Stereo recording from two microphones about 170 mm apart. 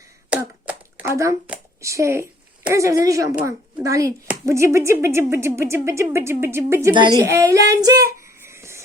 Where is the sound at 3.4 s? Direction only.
10° right (ahead or behind).